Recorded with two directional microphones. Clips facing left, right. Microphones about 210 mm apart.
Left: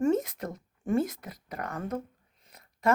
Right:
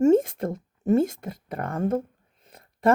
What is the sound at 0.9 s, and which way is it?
Speech, 25° right (ahead or behind).